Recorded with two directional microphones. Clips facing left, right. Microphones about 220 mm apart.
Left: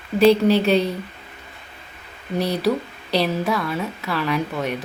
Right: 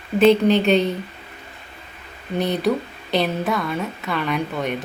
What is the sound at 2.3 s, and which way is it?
Speech, centre (ahead or behind).